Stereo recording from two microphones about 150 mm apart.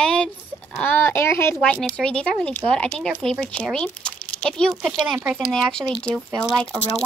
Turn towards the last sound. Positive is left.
turn(degrees=5)  # may be behind; listen again after turning